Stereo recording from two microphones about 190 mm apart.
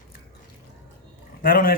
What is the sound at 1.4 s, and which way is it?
Speech, 50° left (ahead or behind).